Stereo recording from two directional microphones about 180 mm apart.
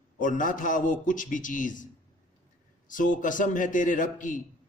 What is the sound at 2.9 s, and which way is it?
A man's voice, 45° left (ahead or behind).